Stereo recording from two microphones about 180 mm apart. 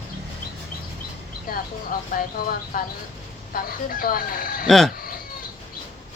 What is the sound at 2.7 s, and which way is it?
Speech, 55° left (ahead or behind).